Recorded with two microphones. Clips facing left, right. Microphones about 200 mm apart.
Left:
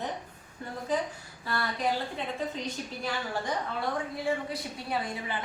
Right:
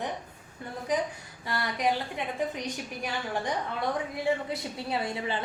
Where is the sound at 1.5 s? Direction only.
15° right (ahead or behind).